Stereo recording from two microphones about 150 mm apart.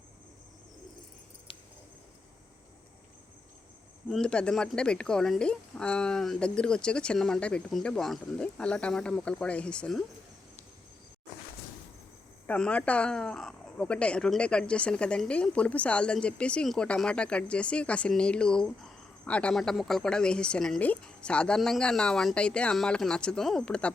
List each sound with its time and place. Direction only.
1.5 s keys jangling: 35° left (ahead or behind)
4.1 s speech: 5° left (ahead or behind)
12.5 s speech: 10° left (ahead or behind)